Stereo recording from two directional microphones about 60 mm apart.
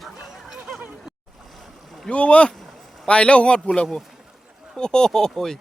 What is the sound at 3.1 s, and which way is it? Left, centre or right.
A man's voice, centre.